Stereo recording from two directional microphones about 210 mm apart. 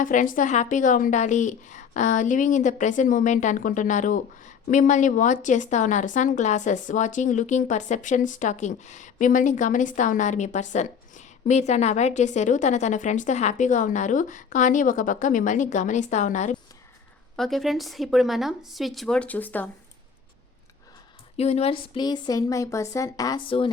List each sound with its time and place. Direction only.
0.0 s a woman's voice: 40° left (ahead or behind)
17.3 s speech: centre (ahead or behind)
21.3 s speech: 30° left (ahead or behind)